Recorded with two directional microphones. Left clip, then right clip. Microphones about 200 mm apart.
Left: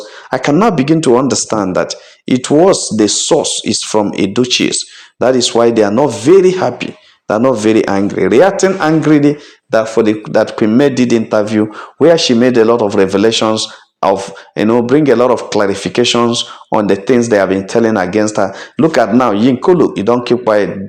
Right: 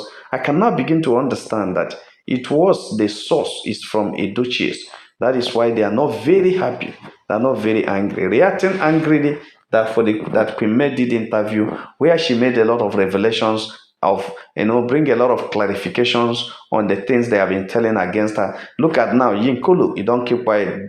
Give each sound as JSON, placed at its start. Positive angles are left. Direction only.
{"t": 0.3, "sound": "a man's voice", "side_deg": 45}